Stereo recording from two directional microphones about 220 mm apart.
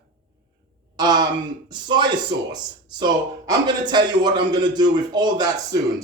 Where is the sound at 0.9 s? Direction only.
20° right (ahead or behind).